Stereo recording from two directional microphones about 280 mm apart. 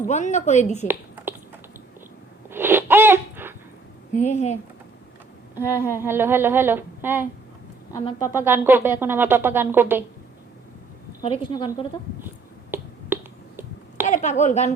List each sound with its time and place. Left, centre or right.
0.0 s a woman's voice: left
0.9 s a sound: centre
2.5 s a sound: centre
4.1 s a woman's voice: left
5.5 s speech: centre
8.4 s speech: centre
11.2 s a woman's voice: centre
12.7 s finger snapping: centre
14.1 s a woman's voice: left